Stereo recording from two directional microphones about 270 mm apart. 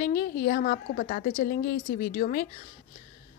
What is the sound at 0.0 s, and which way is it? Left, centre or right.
Speech, left.